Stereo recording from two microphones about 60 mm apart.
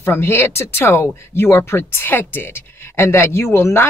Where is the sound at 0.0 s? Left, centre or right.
Left.